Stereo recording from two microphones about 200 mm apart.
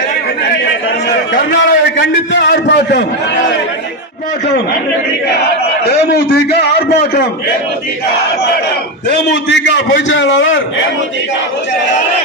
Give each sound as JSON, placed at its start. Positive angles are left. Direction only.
{"t": 1.3, "sound": "a sound", "side_deg": 60}
{"t": 2.5, "sound": "a man's voice", "side_deg": 60}
{"t": 5.8, "sound": "a man's voice", "side_deg": 55}
{"t": 9.0, "sound": "a man's voice", "side_deg": 60}